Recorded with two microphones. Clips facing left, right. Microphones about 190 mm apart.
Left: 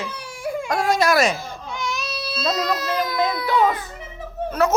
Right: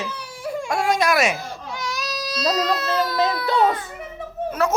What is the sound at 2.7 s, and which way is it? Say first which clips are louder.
Speech: right 1 dB; 10° left (ahead or behind).